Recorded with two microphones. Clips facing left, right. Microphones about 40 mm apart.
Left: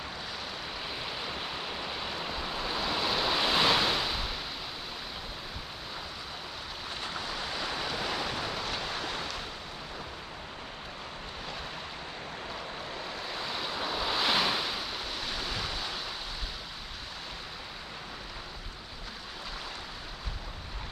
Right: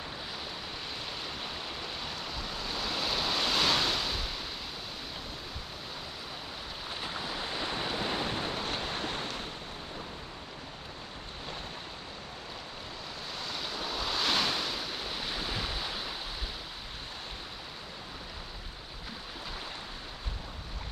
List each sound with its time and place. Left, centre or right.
0.9 s waves: centre
8.4 s rain: right
13.2 s waves: centre
15.1 s waves: centre